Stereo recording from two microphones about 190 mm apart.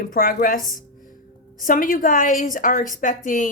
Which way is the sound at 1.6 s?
45° left (ahead or behind).